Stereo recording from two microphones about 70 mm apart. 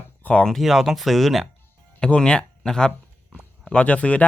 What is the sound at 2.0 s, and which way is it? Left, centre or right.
Speech, centre.